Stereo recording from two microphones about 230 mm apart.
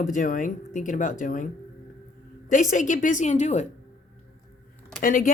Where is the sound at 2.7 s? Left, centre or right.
Left.